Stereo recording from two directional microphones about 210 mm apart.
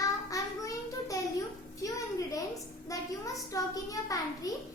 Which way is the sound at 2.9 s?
15° left (ahead or behind).